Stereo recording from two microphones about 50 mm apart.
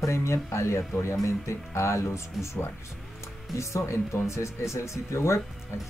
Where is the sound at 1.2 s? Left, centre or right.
Left.